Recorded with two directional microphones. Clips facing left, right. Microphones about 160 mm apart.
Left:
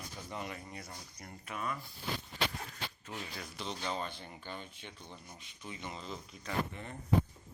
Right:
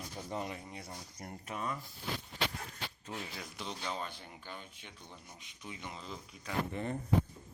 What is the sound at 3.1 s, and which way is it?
Speech, 5° right (ahead or behind).